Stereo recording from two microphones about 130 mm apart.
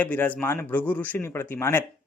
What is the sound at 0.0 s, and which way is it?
A man's voice, 15° left (ahead or behind).